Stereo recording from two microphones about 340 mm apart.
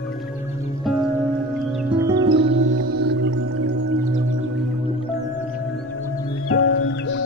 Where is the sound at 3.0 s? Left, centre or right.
Right.